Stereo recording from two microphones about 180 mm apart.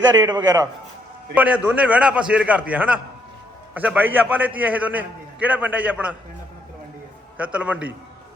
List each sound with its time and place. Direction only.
0.1 s a man's voice: 25° right (ahead or behind)
1.4 s a man's voice: 10° right (ahead or behind)
7.3 s a man's voice: 5° right (ahead or behind)